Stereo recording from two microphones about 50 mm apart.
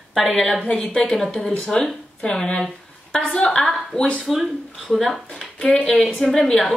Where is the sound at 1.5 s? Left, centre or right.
Left.